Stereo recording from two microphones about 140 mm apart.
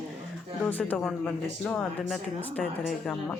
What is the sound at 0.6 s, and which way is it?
Speech, 10° left (ahead or behind).